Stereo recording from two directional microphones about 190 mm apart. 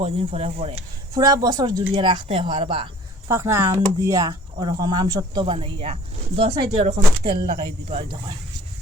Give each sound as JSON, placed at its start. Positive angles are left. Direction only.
{"t": 0.0, "sound": "speech", "side_deg": -30}
{"t": 1.1, "sound": "speech", "side_deg": -20}
{"t": 3.2, "sound": "speech", "side_deg": -15}